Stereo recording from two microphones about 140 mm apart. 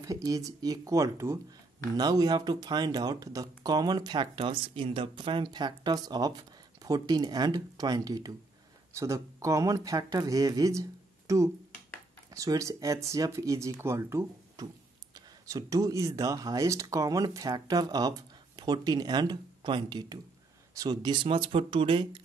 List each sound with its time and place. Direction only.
0.0 s speech: 25° right (ahead or behind)